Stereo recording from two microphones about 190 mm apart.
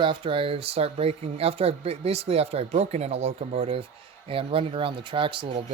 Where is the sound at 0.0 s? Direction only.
25° right (ahead or behind).